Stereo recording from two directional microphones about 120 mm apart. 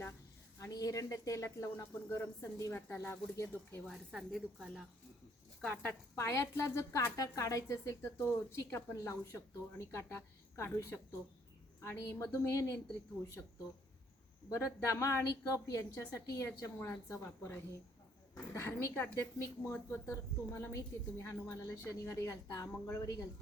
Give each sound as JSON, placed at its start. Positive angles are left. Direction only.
{"t": 0.6, "sound": "a woman's voice", "side_deg": 30}
{"t": 3.8, "sound": "a woman's voice", "side_deg": 0}
{"t": 5.6, "sound": "a woman's voice", "side_deg": 10}
{"t": 6.1, "sound": "a woman's voice", "side_deg": 25}
{"t": 14.5, "sound": "a woman's voice", "side_deg": 25}